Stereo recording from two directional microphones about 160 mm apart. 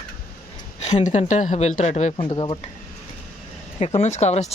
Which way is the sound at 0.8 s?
45° left (ahead or behind).